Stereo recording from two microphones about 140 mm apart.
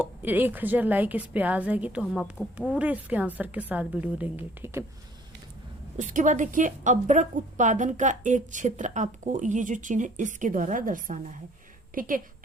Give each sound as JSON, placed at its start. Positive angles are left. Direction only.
{"t": 0.0, "sound": "a woman's voice", "side_deg": -10}
{"t": 6.0, "sound": "a woman's voice", "side_deg": -65}